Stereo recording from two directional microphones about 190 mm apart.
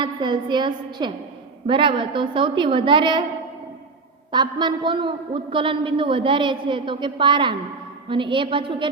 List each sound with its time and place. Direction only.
0.0 s a man's voice: 25° right (ahead or behind)
4.3 s a man's voice: 25° right (ahead or behind)